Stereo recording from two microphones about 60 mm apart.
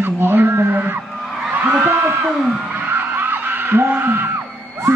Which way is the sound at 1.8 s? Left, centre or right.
Right.